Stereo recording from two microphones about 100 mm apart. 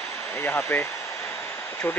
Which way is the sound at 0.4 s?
20° left (ahead or behind).